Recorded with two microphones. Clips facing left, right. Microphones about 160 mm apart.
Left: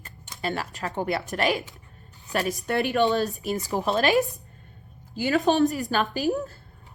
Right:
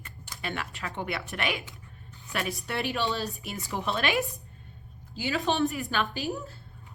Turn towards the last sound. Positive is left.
turn(degrees=40)  # may be behind; listen again after turning